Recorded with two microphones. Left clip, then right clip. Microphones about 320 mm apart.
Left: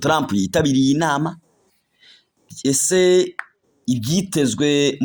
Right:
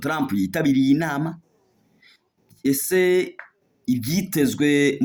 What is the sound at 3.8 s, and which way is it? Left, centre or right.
Speech, centre.